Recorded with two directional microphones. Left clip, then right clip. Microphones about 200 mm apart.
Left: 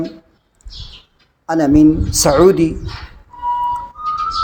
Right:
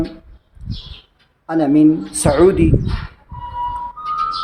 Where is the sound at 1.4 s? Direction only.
30° left (ahead or behind).